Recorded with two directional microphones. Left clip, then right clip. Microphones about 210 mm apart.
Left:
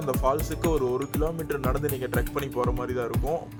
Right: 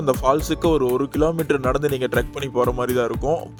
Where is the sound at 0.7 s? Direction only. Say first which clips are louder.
Right 6 dB; 25° right (ahead or behind).